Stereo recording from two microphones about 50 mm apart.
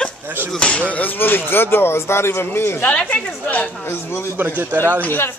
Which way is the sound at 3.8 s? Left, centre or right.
Left.